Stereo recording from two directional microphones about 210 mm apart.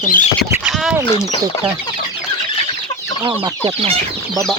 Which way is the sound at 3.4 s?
25° right (ahead or behind).